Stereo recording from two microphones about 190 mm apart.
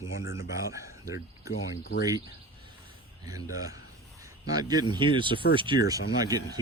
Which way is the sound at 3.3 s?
20° right (ahead or behind).